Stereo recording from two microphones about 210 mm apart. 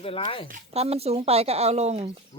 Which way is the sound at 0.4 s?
35° right (ahead or behind).